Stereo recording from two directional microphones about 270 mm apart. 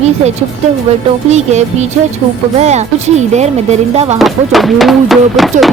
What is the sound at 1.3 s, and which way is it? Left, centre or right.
Speech, right.